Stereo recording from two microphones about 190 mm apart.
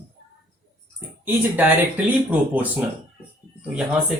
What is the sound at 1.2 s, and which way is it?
Speech, 10° right (ahead or behind).